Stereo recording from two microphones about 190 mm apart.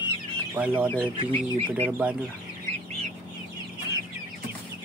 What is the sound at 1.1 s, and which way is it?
Speech, 30° right (ahead or behind).